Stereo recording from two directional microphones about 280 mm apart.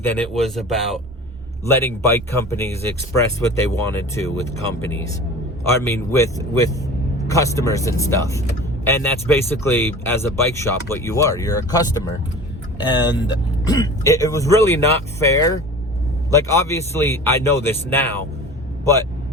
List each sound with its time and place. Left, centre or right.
0.0 s speech: centre